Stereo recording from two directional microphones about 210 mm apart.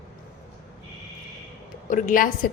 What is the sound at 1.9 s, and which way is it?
Speech, 35° left (ahead or behind).